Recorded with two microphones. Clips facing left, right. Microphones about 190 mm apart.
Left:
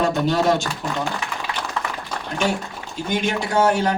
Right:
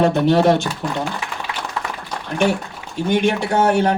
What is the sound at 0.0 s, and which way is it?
Speech, 60° right (ahead or behind).